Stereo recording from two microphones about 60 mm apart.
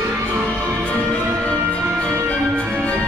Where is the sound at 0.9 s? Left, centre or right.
Left.